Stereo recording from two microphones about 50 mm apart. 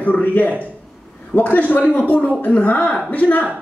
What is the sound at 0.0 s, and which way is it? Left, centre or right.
A man's voice, left.